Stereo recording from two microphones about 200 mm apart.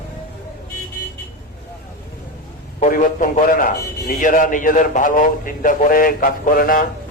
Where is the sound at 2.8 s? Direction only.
40° left (ahead or behind).